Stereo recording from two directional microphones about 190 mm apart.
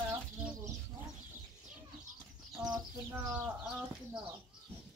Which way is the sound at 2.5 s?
20° right (ahead or behind).